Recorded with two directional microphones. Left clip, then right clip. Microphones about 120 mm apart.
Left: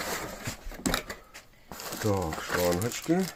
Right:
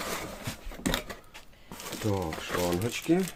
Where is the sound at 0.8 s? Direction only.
5° right (ahead or behind).